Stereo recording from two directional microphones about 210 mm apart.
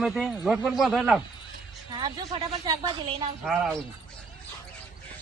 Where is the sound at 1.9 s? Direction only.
20° right (ahead or behind).